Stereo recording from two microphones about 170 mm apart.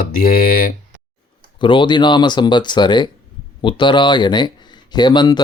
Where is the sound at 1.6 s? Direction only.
30° left (ahead or behind).